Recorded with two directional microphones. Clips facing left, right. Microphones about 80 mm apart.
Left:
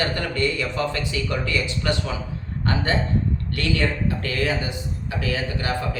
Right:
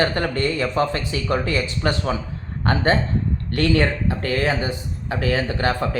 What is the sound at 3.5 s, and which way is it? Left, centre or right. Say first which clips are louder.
Speech: right 6 dB; right.